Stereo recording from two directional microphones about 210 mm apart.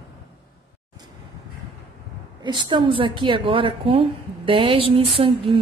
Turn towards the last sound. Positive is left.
turn(degrees=-25)  # may be behind; listen again after turning